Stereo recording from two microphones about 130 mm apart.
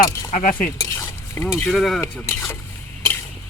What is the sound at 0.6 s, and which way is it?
Cutlery, 20° left (ahead or behind).